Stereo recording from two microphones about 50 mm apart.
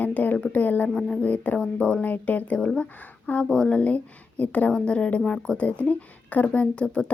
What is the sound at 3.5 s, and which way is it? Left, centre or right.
Speech, centre.